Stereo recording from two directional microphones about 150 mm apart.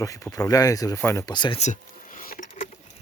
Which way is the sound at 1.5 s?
55° left (ahead or behind).